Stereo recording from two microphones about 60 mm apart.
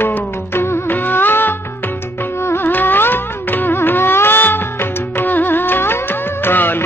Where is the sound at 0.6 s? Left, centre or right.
Left.